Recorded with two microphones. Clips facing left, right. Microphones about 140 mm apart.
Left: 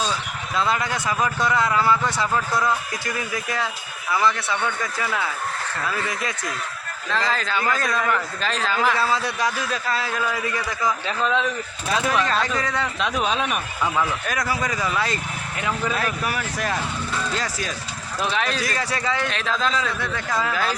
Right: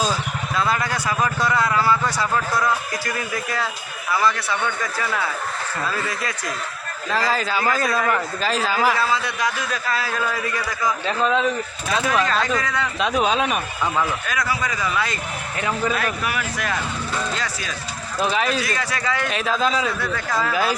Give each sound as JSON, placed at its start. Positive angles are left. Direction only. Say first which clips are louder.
{"t": 0.5, "sound": "a man's voice", "louder": "even", "side_deg": 20}
{"t": 3.2, "sound": "a man's voice", "louder": "left 1 dB", "side_deg": 20}
{"t": 5.9, "sound": "a man's voice", "louder": "right 1 dB", "side_deg": 20}
{"t": 7.1, "sound": "a man's voice", "louder": "right 2 dB", "side_deg": -5}
{"t": 9.1, "sound": "a man's voice", "louder": "even", "side_deg": 35}
{"t": 10.8, "sound": "a man's voice", "louder": "right 3 dB", "side_deg": -5}
{"t": 12.5, "sound": "speech", "louder": "right 1 dB", "side_deg": 30}
{"t": 13.0, "sound": "a man's voice", "louder": "right 5 dB", "side_deg": 0}
{"t": 14.3, "sound": "speech", "louder": "even", "side_deg": 45}
{"t": 16.2, "sound": "speech", "louder": "even", "side_deg": 35}
{"t": 18.2, "sound": "a man's voice", "louder": "right 3 dB", "side_deg": -5}
{"t": 18.6, "sound": "speech", "louder": "even", "side_deg": 35}
{"t": 19.3, "sound": "speech", "louder": "right 3 dB", "side_deg": -10}